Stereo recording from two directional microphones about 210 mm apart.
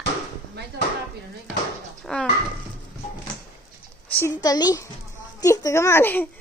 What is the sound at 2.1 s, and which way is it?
Speech, centre (ahead or behind).